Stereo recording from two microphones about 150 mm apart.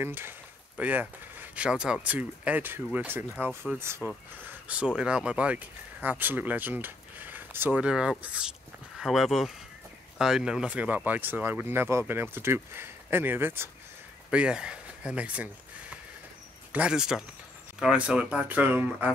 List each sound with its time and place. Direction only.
0.0 s speech: 15° right (ahead or behind)